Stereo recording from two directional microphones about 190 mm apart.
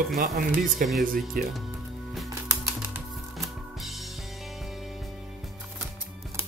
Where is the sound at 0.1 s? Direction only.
45° right (ahead or behind).